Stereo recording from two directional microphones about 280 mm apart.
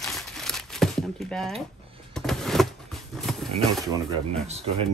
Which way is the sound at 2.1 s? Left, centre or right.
Centre.